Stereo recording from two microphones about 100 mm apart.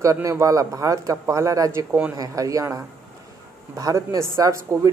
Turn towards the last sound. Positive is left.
turn(degrees=-35)  # may be behind; listen again after turning